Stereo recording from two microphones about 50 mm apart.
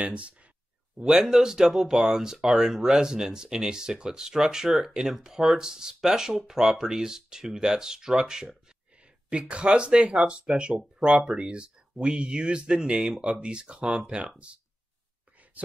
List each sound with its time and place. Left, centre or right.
0.0 s speech: right
0.9 s speech: centre
8.6 s a sound: centre
10.2 s speech: right